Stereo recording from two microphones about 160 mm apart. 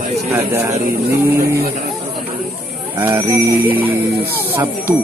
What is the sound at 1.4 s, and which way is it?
Speech, 80° right.